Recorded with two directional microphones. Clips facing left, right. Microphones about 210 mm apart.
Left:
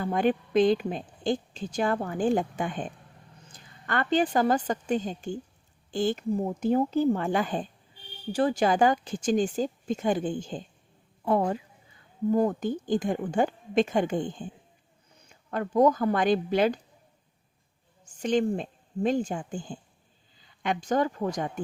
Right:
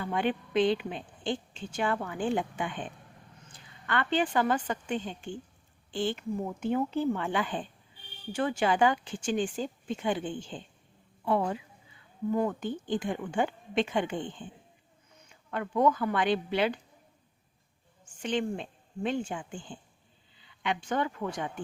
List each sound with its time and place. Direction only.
0.0 s a woman's voice: 40° left (ahead or behind)
18.2 s speech: 40° left (ahead or behind)